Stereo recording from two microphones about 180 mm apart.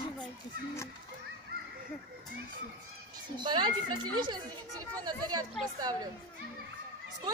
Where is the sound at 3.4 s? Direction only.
25° right (ahead or behind).